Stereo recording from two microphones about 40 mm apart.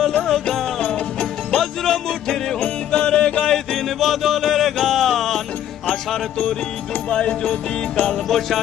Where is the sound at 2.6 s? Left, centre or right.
Left.